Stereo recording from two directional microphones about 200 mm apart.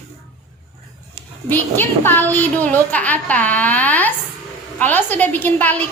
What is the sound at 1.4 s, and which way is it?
A child's voice, 10° left (ahead or behind).